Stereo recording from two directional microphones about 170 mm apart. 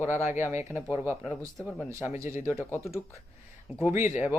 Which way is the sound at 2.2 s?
15° right (ahead or behind).